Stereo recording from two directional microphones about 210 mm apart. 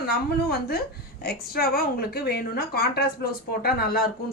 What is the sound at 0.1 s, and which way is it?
A woman's voice, 45° left (ahead or behind).